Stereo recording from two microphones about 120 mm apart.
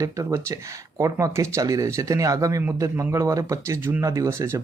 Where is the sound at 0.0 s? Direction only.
25° right (ahead or behind).